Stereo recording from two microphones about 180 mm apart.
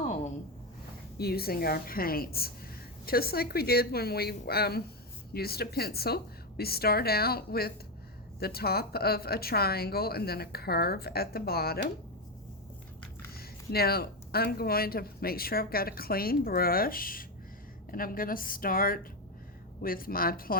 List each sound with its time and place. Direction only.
1.2 s speech: 60° left (ahead or behind)
13.3 s a woman's voice: 60° left (ahead or behind)